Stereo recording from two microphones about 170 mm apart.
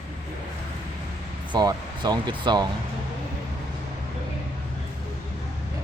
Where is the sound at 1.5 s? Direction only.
25° right (ahead or behind).